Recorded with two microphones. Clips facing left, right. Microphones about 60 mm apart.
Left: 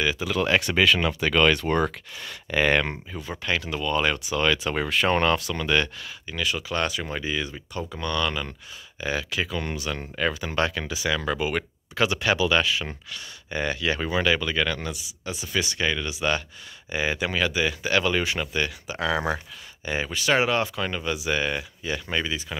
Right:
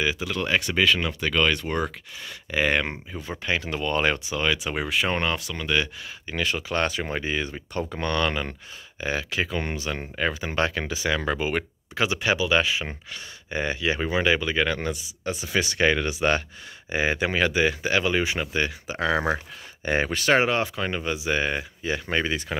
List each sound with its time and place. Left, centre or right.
0.2 s speech: centre
3.3 s speech: right
3.6 s speech: right
4.4 s speech: centre
6.2 s speech: right
14.9 s speech: right
17.9 s speech: centre
19.8 s speech: right